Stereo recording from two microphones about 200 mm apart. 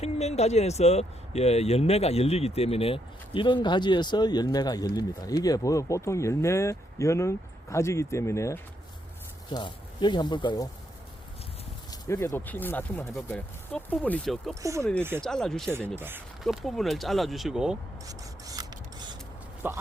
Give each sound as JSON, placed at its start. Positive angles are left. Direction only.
{"t": 0.0, "sound": "speech", "side_deg": 35}
{"t": 11.9, "sound": "speech", "side_deg": 15}
{"t": 14.6, "sound": "speech", "side_deg": -15}
{"t": 15.2, "sound": "speech", "side_deg": 5}
{"t": 16.0, "sound": "speech", "side_deg": -10}
{"t": 16.4, "sound": "speech", "side_deg": 0}
{"t": 18.1, "sound": "filing", "side_deg": -20}
{"t": 19.6, "sound": "speech", "side_deg": -10}